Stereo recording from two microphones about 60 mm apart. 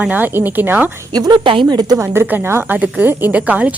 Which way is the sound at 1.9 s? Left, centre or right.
Right.